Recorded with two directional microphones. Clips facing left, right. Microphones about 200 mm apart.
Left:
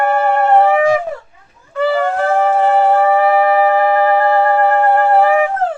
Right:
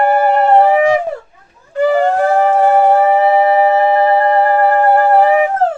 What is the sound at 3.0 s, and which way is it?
Shofar, 25° right (ahead or behind).